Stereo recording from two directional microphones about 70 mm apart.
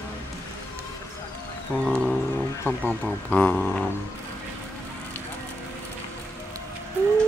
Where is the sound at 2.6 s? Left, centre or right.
Left.